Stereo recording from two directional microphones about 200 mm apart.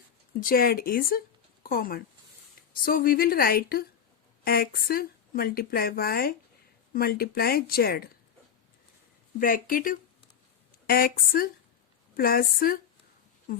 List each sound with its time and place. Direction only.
0.3 s speech: 45° left (ahead or behind)
9.4 s speech: 45° left (ahead or behind)